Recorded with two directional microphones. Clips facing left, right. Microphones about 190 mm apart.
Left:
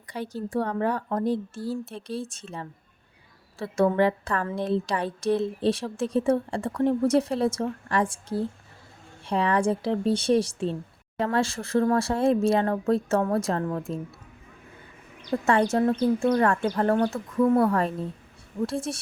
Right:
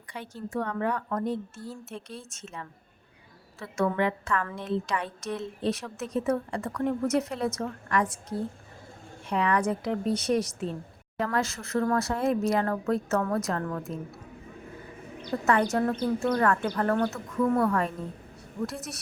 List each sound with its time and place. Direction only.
0.1 s speech: 35° left (ahead or behind)
15.3 s speech: 25° left (ahead or behind)